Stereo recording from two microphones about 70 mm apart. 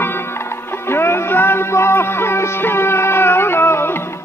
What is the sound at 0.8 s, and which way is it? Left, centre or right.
Music, left.